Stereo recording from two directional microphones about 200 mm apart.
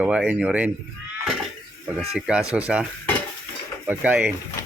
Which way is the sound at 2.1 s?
5° right (ahead or behind).